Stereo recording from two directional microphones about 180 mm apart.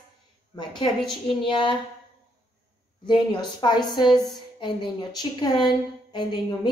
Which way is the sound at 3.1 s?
25° left (ahead or behind).